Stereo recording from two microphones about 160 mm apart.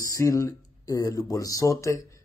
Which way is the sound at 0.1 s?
20° left (ahead or behind).